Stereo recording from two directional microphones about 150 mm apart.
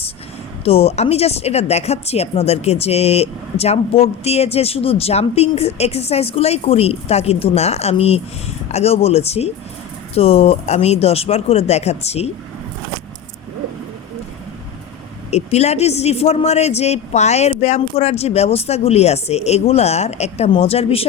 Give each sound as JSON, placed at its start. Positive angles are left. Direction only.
{"t": 0.6, "sound": "speech", "side_deg": 40}
{"t": 15.3, "sound": "speech", "side_deg": 45}